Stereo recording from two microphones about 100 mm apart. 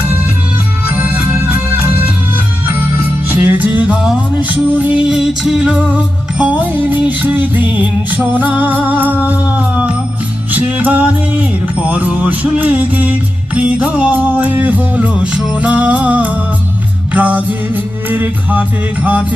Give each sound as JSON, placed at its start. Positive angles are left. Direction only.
{"t": 0.9, "sound": "music", "side_deg": -20}
{"t": 3.2, "sound": "music", "side_deg": -15}